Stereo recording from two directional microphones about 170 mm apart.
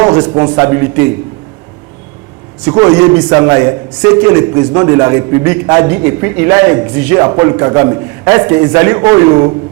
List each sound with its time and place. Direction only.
0.0 s a man's voice: 20° right (ahead or behind)
2.6 s a man's voice: 20° right (ahead or behind)